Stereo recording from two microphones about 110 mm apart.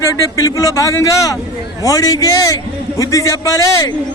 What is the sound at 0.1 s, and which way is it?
A man's voice, 30° left (ahead or behind).